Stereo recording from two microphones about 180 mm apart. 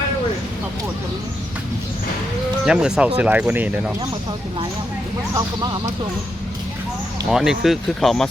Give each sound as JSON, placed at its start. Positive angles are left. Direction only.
{"t": 2.6, "sound": "speech", "side_deg": -5}
{"t": 5.3, "sound": "speech", "side_deg": -20}
{"t": 7.3, "sound": "speech", "side_deg": 0}